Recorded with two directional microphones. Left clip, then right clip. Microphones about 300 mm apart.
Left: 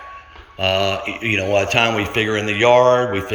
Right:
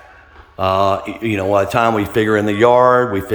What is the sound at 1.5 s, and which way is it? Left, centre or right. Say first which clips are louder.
Speech: right 3 dB; centre.